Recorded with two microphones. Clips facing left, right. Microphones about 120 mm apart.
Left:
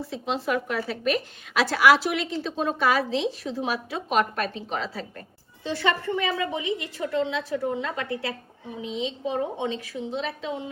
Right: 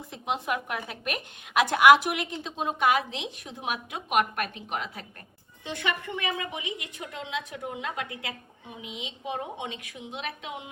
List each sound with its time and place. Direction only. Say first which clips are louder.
0.0 s a woman's voice: left 4 dB; 20° right (ahead or behind)
5.6 s a woman's voice: left 6 dB; 15° right (ahead or behind)